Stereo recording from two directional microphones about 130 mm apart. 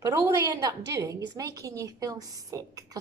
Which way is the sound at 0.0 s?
25° right (ahead or behind).